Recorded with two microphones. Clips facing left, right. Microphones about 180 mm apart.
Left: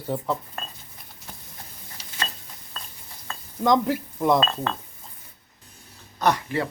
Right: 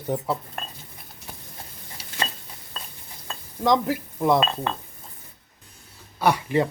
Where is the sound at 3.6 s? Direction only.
Centre (ahead or behind).